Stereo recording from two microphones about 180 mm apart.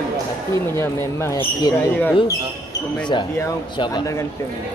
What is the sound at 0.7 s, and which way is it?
Speech, 15° left (ahead or behind).